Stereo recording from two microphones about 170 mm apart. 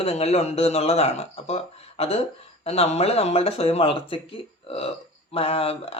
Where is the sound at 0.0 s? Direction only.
35° left (ahead or behind).